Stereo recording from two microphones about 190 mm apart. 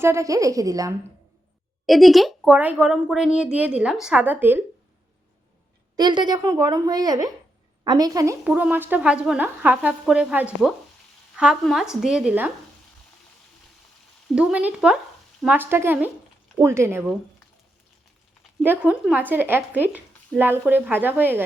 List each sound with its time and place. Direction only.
0.0 s speech: 15° right (ahead or behind)
1.9 s speech: centre (ahead or behind)
6.0 s a woman's voice: 20° right (ahead or behind)
8.4 s speech: 5° right (ahead or behind)
14.3 s speech: 5° right (ahead or behind)
18.6 s speech: 10° right (ahead or behind)